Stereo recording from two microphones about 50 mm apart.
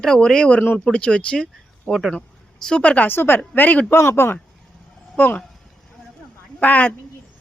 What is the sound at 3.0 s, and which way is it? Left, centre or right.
Speech, left.